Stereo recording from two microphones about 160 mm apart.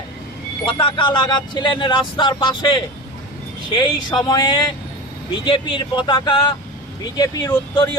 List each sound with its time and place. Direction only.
0.6 s speech: 30° left (ahead or behind)